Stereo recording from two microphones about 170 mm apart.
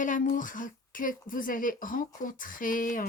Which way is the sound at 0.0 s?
50° left (ahead or behind).